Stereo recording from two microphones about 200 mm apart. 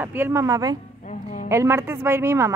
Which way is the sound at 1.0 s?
35° left (ahead or behind).